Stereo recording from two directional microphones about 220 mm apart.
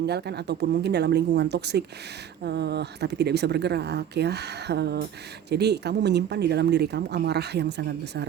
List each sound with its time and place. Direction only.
0.0 s speech: 50° right (ahead or behind)